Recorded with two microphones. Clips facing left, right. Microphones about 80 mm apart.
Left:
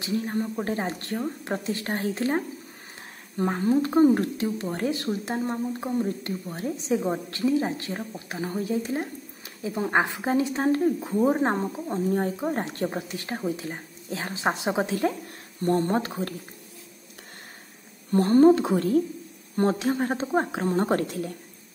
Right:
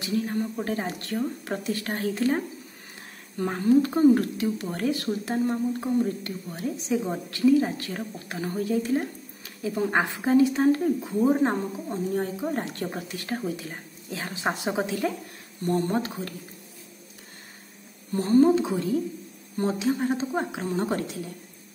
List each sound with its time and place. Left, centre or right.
0.0 s speech: left
18.1 s a woman's voice: left